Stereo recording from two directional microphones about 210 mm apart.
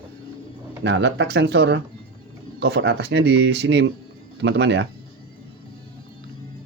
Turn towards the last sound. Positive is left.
turn(degrees=-55)  # may be behind; listen again after turning